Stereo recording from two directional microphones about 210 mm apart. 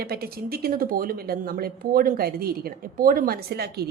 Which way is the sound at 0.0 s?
45° right (ahead or behind).